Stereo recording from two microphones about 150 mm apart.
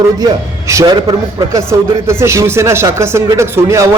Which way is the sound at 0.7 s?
25° right (ahead or behind).